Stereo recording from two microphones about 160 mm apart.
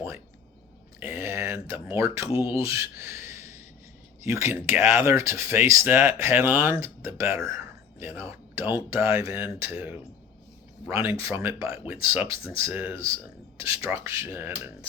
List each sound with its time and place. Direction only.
0.9 s speech: 15° right (ahead or behind)